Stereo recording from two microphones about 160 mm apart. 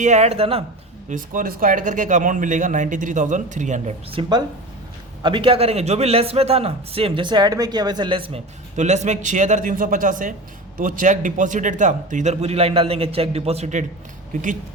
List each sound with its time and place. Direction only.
0.0 s a man's voice: 45° right (ahead or behind)
1.1 s speech: 55° right (ahead or behind)
4.1 s a man's voice: 30° right (ahead or behind)
8.7 s speech: 45° right (ahead or behind)